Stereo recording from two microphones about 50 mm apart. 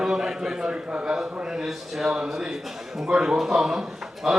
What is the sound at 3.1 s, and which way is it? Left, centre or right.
A man's voice, centre.